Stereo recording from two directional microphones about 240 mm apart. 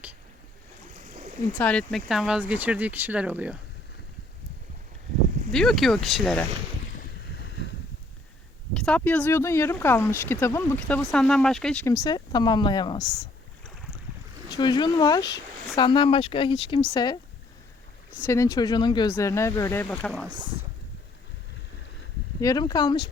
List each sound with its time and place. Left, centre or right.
1.0 s a sound: right
1.5 s speech: centre
5.5 s speech: centre
6.9 s boat: left
8.7 s speech: centre
14.5 s speech: centre
18.2 s speech: centre
22.4 s speech: centre